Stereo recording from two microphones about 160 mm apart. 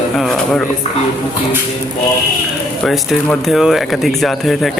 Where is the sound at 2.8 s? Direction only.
Centre (ahead or behind).